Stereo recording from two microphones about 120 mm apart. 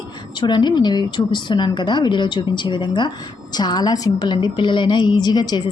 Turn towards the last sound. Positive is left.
turn(degrees=35)  # may be behind; listen again after turning